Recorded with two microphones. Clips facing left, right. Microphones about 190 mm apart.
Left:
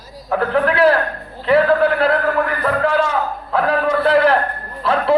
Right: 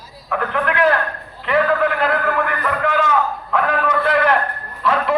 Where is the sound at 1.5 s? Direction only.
35° left (ahead or behind).